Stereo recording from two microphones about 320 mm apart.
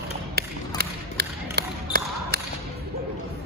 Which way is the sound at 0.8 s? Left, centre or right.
Right.